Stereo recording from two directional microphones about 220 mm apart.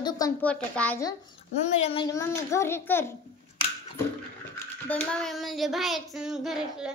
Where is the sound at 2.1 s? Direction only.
10° left (ahead or behind).